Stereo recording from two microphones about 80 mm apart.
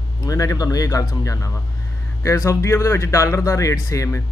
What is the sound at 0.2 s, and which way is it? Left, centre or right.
Speech, left.